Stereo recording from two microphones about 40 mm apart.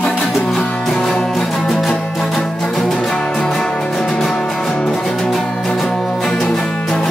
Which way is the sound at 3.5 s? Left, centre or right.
Centre.